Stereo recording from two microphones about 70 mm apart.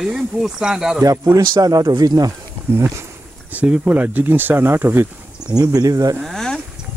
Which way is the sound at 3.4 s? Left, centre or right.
Centre.